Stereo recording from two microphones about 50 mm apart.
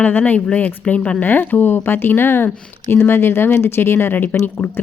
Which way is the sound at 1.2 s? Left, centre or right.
Left.